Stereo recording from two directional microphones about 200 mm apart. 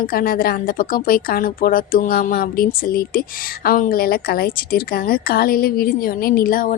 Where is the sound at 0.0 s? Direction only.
45° left (ahead or behind).